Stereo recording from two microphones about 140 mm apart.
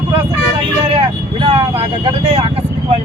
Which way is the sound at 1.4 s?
40° right (ahead or behind).